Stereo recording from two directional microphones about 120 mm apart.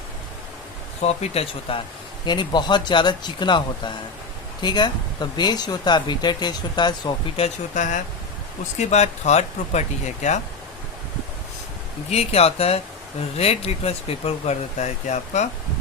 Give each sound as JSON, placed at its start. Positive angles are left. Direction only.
{"t": 1.0, "sound": "speech", "side_deg": 60}
{"t": 2.2, "sound": "speech", "side_deg": 40}
{"t": 7.3, "sound": "speech", "side_deg": 75}
{"t": 8.8, "sound": "speech", "side_deg": 70}
{"t": 12.1, "sound": "speech", "side_deg": 60}